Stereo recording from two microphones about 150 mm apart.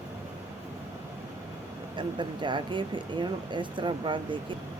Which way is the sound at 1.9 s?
30° right (ahead or behind).